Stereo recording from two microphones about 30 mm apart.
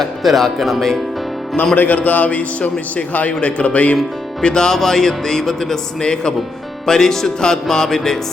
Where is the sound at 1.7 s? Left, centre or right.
Left.